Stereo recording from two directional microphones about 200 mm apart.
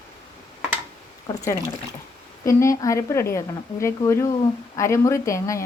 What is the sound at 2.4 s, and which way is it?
Speech, 15° left (ahead or behind).